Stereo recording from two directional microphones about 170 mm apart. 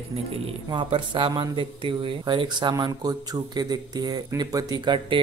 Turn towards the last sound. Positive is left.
turn(degrees=-25)  # may be behind; listen again after turning